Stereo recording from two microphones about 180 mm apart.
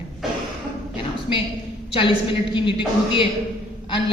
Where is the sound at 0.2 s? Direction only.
Centre (ahead or behind).